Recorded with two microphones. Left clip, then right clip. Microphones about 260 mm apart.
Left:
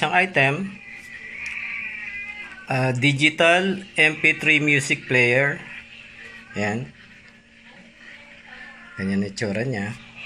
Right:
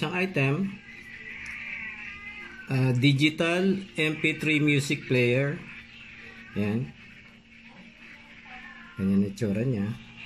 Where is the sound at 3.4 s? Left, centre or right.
Left.